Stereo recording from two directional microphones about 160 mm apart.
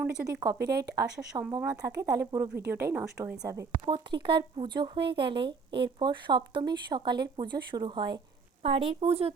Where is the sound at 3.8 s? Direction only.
30° right (ahead or behind).